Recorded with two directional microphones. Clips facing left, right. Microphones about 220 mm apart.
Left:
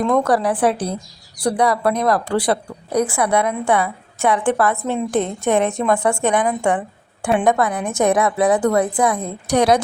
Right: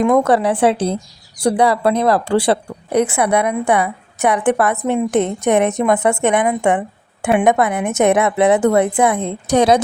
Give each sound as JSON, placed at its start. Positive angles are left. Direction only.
{"t": 0.0, "sound": "a woman's voice", "side_deg": -20}